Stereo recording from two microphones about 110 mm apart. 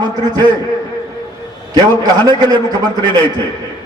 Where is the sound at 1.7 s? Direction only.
35° right (ahead or behind).